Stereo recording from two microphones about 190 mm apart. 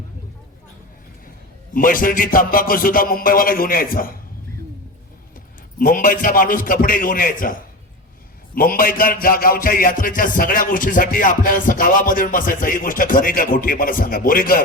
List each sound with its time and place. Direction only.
1.7 s music: 45° left (ahead or behind)
5.8 s music: 45° left (ahead or behind)